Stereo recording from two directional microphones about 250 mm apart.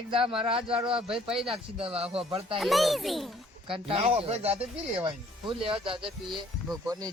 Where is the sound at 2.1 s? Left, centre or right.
Right.